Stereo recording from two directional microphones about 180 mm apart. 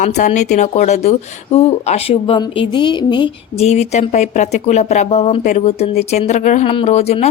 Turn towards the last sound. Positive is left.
turn(degrees=35)  # may be behind; listen again after turning